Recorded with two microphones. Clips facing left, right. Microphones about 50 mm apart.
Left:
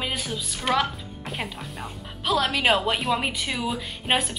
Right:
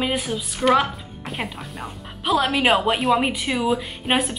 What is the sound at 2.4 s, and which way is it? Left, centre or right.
A woman's voice, centre.